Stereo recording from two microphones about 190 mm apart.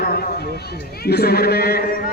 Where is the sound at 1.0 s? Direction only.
55° left (ahead or behind).